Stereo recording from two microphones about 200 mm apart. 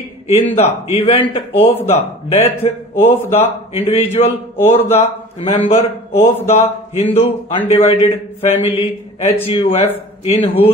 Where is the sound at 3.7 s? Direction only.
30° left (ahead or behind).